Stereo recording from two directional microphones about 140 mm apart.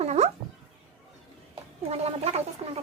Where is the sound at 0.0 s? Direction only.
50° right (ahead or behind).